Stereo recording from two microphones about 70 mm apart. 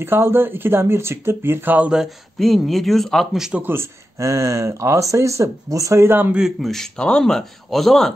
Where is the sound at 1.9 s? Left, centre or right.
Centre.